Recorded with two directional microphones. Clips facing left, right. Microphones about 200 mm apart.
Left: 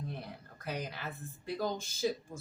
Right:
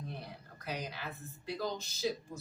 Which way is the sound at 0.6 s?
55° left (ahead or behind).